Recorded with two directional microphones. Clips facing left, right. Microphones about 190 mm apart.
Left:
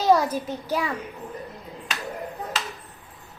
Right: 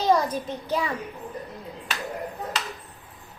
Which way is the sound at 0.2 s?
5° left (ahead or behind).